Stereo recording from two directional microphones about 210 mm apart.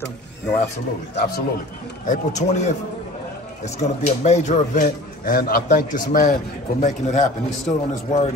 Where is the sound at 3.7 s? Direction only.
35° left (ahead or behind).